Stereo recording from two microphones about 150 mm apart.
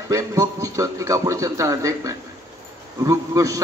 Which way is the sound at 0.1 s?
20° right (ahead or behind).